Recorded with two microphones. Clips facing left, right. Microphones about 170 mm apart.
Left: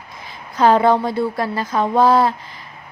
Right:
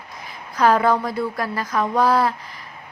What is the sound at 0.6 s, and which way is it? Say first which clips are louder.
A woman's voice: left 3 dB; 25° left (ahead or behind).